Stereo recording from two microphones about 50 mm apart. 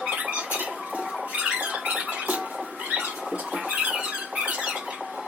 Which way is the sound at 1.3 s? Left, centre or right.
Right.